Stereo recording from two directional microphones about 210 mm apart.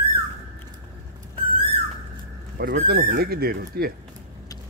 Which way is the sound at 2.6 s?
45° right (ahead or behind).